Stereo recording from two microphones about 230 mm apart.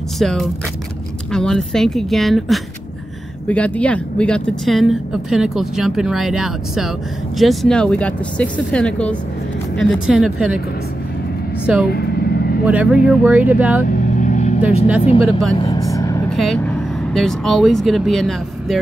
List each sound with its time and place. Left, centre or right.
0.2 s speech: centre
11.6 s speech: centre
11.9 s vehicle: left
13.0 s speech: centre
13.8 s vehicle: left
15.0 s speech: left
15.5 s vehicle: centre
16.3 s speech: centre